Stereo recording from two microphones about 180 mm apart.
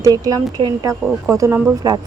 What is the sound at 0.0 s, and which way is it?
A woman's voice, 20° right (ahead or behind).